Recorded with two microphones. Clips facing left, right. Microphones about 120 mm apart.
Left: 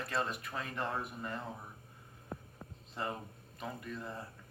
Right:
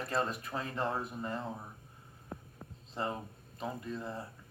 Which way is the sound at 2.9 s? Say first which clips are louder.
Right 3 dB; 30° right (ahead or behind).